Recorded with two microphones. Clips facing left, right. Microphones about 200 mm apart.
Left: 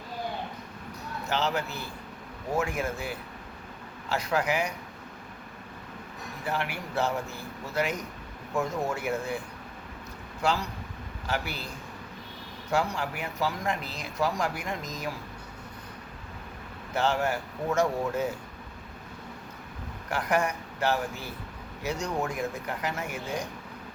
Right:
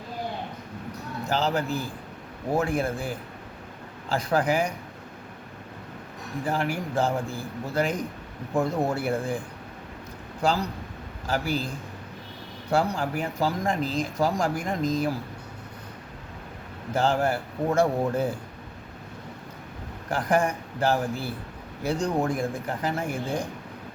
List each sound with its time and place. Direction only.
1.3 s speech: 35° right (ahead or behind)
4.1 s speech: 30° right (ahead or behind)
6.4 s speech: 30° right (ahead or behind)
10.4 s speech: 35° right (ahead or behind)
12.6 s speech: 35° right (ahead or behind)
16.9 s speech: 30° right (ahead or behind)
20.1 s speech: 30° right (ahead or behind)